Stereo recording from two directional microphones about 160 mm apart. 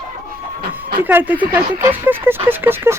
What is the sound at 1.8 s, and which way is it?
Speech, 15° right (ahead or behind).